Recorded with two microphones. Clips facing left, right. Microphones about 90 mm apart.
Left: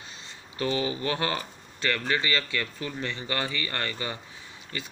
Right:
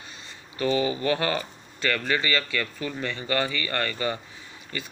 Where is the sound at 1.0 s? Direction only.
20° left (ahead or behind).